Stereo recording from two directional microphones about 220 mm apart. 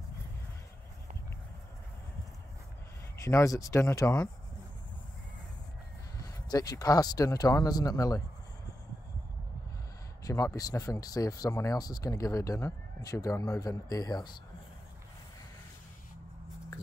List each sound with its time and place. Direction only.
3.2 s speech: 15° left (ahead or behind)
6.2 s speech: 15° left (ahead or behind)
10.2 s speech: 15° left (ahead or behind)